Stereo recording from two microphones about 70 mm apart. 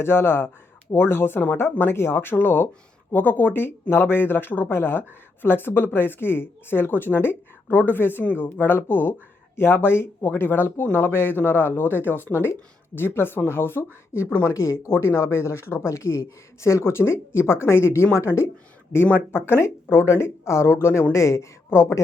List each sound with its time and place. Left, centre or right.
0.0 s speech: left
19.5 s speech: left